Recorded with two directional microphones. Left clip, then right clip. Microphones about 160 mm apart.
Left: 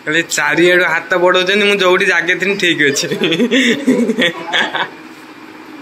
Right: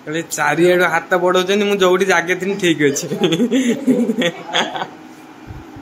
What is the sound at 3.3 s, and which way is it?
Chuckle, 5° right (ahead or behind).